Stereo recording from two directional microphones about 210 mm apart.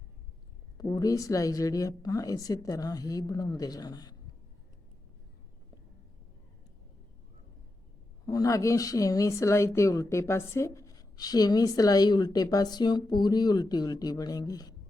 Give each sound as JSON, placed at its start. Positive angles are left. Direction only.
{"t": 0.8, "sound": "speech", "side_deg": 20}
{"t": 8.3, "sound": "speech", "side_deg": 15}